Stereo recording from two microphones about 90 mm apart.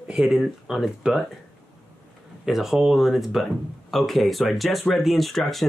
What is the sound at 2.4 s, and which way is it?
Speech, 5° right (ahead or behind).